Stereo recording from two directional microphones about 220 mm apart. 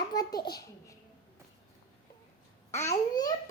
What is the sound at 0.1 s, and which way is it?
Speech, 15° left (ahead or behind).